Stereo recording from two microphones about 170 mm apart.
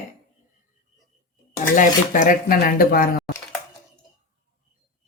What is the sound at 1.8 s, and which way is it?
Speech, 50° left (ahead or behind).